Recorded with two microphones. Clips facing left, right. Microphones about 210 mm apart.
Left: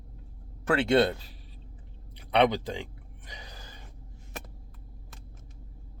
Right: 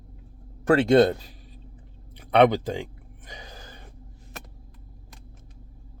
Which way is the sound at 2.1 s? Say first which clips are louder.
Right 5 dB; 50° right (ahead or behind).